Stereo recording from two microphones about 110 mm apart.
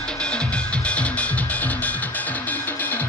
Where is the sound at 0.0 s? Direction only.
10° left (ahead or behind).